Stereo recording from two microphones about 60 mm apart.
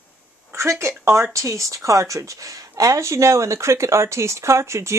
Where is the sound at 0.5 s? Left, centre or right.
Right.